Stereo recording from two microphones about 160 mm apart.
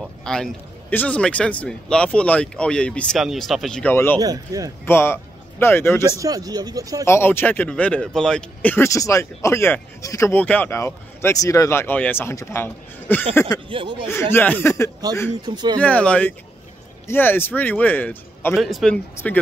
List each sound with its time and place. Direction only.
0.2 s a man's voice: 5° left (ahead or behind)
3.9 s speech: 15° left (ahead or behind)
4.2 s speech: 25° right (ahead or behind)
4.8 s speech: 15° left (ahead or behind)
6.1 s speech: 20° right (ahead or behind)
7.1 s speech: 15° left (ahead or behind)
13.7 s speech: 30° right (ahead or behind)
14.3 s speech: 10° left (ahead or behind)
15.4 s speech: 25° right (ahead or behind)
15.8 s speech: 10° left (ahead or behind)
18.6 s a man's voice: centre (ahead or behind)